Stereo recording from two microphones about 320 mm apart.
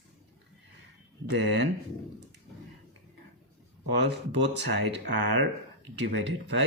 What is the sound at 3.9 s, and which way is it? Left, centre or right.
Speech, right.